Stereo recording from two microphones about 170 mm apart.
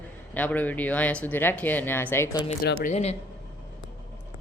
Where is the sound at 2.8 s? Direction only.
40° left (ahead or behind).